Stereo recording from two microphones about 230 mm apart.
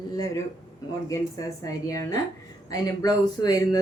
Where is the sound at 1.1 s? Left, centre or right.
Centre.